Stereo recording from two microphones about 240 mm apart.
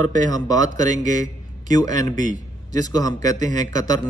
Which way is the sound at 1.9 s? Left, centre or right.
Centre.